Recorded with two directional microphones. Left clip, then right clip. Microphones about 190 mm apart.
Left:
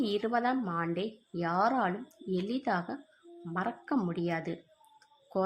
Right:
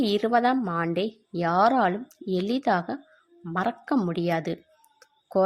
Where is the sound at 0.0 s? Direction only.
40° right (ahead or behind).